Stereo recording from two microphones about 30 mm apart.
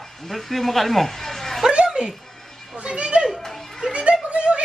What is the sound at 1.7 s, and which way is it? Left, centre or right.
Music, right.